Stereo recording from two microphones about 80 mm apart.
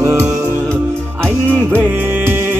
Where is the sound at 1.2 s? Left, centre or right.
Right.